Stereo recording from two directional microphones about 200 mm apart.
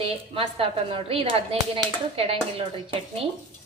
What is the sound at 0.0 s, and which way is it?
A woman's voice, 25° right (ahead or behind).